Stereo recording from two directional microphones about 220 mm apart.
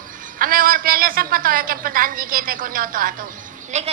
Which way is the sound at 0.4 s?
40° right (ahead or behind).